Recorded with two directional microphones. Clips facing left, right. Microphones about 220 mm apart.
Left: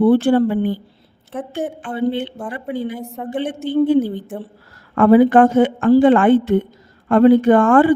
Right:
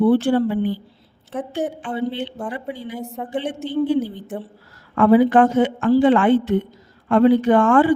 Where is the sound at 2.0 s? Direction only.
55° left (ahead or behind).